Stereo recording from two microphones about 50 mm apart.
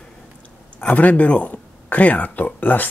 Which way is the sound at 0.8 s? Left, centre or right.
Left.